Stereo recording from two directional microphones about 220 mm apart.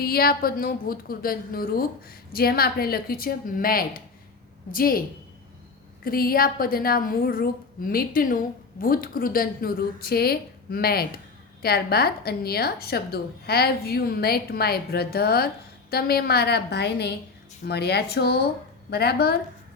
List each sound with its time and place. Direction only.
0.0 s a woman's voice: 45° left (ahead or behind)
6.1 s a woman's voice: 40° left (ahead or behind)